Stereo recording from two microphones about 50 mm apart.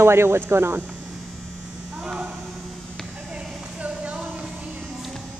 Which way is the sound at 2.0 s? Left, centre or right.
Centre.